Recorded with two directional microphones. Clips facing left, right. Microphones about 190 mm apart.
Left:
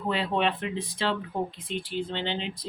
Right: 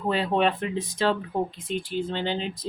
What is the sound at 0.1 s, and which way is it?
Speech, 45° right (ahead or behind).